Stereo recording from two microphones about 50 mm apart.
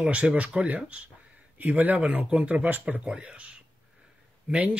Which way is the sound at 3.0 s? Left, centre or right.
Centre.